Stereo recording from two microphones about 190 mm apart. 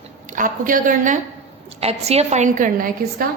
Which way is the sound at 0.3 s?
45° right (ahead or behind).